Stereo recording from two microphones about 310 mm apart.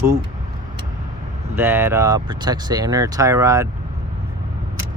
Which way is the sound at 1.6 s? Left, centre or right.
Centre.